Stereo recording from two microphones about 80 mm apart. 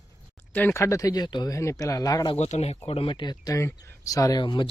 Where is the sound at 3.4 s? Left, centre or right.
Left.